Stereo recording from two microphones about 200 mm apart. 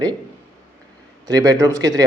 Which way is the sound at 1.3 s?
15° right (ahead or behind).